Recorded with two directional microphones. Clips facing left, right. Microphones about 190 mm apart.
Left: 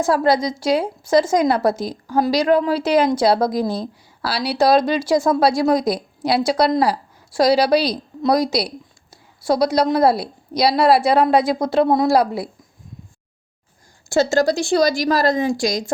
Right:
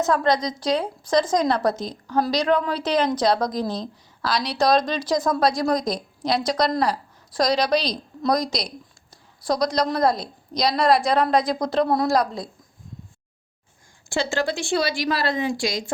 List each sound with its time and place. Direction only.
0.0 s a woman's voice: 10° left (ahead or behind)
11.9 s a woman's voice: 20° left (ahead or behind)
12.1 s a woman's voice: 5° left (ahead or behind)
14.1 s a woman's voice: 40° left (ahead or behind)